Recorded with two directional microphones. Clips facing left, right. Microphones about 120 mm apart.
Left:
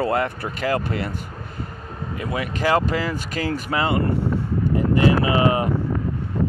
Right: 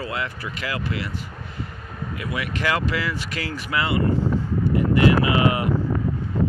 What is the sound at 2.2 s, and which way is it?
Speech, 40° left (ahead or behind).